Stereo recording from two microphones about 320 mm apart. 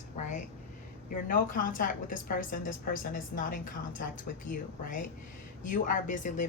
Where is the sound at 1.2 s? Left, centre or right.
Left.